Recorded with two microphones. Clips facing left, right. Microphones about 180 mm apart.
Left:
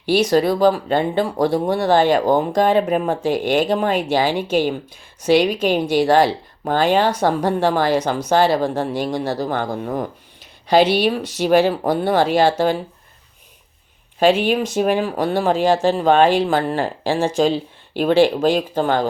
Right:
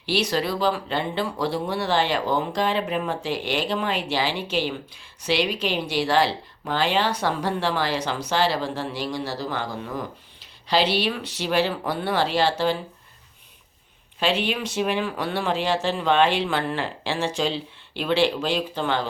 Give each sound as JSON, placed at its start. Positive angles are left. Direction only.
{"t": 0.0, "sound": "speech", "side_deg": 45}
{"t": 14.2, "sound": "speech", "side_deg": 45}